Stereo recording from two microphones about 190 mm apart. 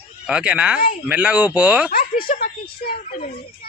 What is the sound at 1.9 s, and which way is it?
Speech, 50° left (ahead or behind).